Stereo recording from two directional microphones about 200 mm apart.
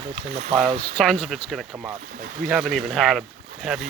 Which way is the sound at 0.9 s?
5° left (ahead or behind).